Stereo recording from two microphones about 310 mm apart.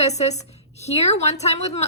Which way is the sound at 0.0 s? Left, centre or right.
Left.